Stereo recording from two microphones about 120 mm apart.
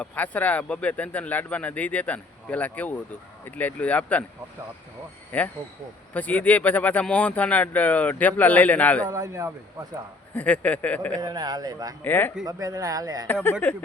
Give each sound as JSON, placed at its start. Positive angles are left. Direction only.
{"t": 0.0, "sound": "speech", "side_deg": 15}
{"t": 5.3, "sound": "speech", "side_deg": 15}
{"t": 9.0, "sound": "speech", "side_deg": -30}
{"t": 10.3, "sound": "speech", "side_deg": 10}
{"t": 11.2, "sound": "speech", "side_deg": -35}
{"t": 12.0, "sound": "speech", "side_deg": 15}
{"t": 12.5, "sound": "speech", "side_deg": -30}
{"t": 13.2, "sound": "speech", "side_deg": 15}